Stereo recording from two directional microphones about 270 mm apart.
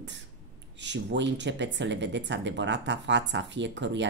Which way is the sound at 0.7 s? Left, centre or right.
Right.